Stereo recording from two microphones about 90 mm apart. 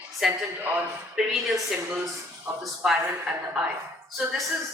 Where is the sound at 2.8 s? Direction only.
5° right (ahead or behind).